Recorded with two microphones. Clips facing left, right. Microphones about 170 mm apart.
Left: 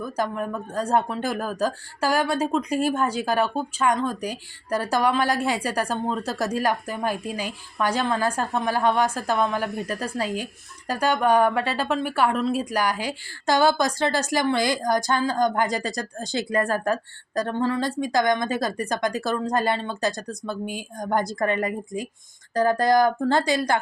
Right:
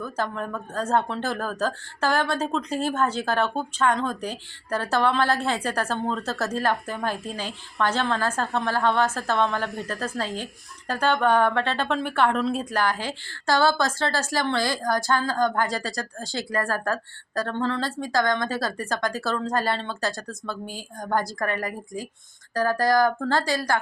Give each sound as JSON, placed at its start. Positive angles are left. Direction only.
{"t": 0.0, "sound": "speech", "side_deg": 10}